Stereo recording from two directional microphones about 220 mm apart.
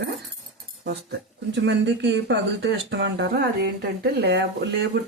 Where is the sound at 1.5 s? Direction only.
55° right (ahead or behind).